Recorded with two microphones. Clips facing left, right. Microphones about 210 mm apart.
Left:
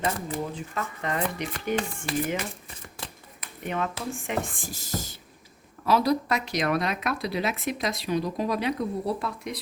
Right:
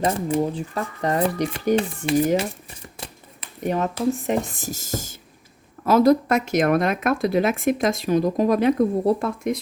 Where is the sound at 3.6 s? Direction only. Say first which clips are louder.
Right 8 dB; 40° right (ahead or behind).